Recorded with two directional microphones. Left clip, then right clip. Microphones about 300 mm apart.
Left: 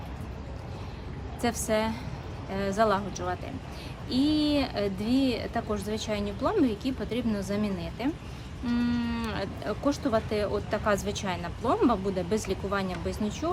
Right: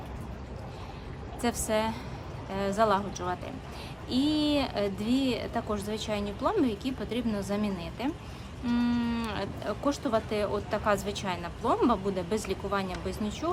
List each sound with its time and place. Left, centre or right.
1.4 s speech: centre